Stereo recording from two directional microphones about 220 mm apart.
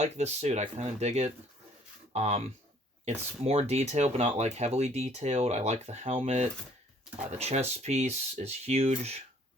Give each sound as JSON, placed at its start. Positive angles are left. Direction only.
{"t": 0.0, "sound": "speech", "side_deg": -30}
{"t": 3.4, "sound": "speech", "side_deg": -30}